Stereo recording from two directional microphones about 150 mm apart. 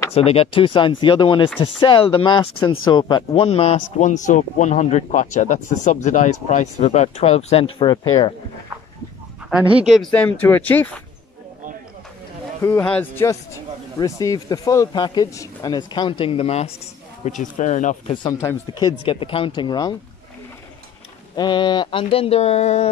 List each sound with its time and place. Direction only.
0.1 s speech: 40° left (ahead or behind)
9.5 s speech: 10° right (ahead or behind)
10.1 s speech: 10° left (ahead or behind)
12.6 s speech: 10° left (ahead or behind); by 16.7 s 45° left (ahead or behind)
17.2 s speech: 55° left (ahead or behind)
18.1 s speech: 30° left (ahead or behind)
21.4 s speech: 30° left (ahead or behind); by 22.8 s 45° left (ahead or behind)